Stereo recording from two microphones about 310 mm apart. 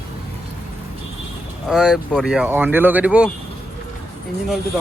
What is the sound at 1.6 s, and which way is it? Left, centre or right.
Speech, centre.